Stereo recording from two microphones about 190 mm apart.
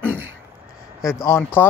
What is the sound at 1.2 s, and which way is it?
Speech, 15° left (ahead or behind).